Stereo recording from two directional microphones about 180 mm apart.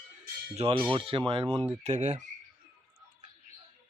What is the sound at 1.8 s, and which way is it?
Speech, 40° right (ahead or behind).